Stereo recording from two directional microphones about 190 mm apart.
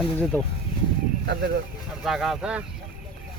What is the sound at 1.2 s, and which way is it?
Speech, 60° right (ahead or behind).